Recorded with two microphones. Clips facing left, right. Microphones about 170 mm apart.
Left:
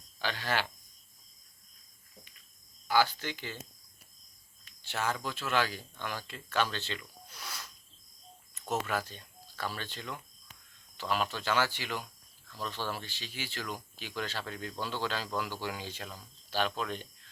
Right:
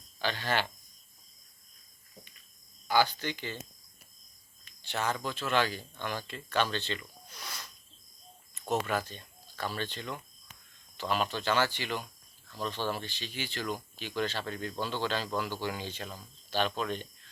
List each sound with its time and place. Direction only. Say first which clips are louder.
0.2 s speech: right 2 dB; 10° left (ahead or behind)
2.8 s speech: right 1 dB; 5° left (ahead or behind)
4.6 s speech: right 1 dB; 5° left (ahead or behind)
12.5 s speech: right 3 dB; 20° right (ahead or behind)
12.9 s speech: right 4 dB; 5° left (ahead or behind)